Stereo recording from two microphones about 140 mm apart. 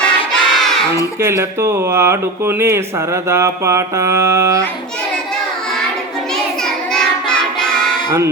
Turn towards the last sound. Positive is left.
turn(degrees=5)  # may be behind; listen again after turning